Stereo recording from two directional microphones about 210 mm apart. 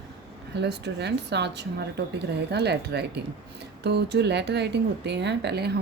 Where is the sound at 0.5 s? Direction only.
55° right (ahead or behind).